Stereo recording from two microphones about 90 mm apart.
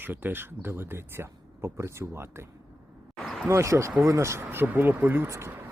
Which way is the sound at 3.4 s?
35° right (ahead or behind).